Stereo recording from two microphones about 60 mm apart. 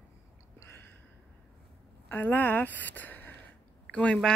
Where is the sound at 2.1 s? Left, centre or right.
Left.